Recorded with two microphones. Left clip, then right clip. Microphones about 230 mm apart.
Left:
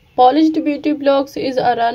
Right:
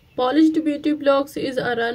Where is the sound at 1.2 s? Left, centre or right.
Left.